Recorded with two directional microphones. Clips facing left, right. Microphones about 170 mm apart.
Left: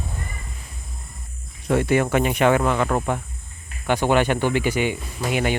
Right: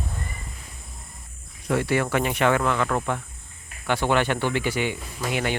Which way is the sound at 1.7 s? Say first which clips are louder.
Left 4 dB; 20° left (ahead or behind).